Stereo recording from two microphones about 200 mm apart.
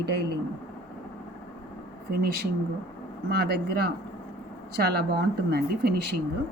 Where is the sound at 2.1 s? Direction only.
50° right (ahead or behind).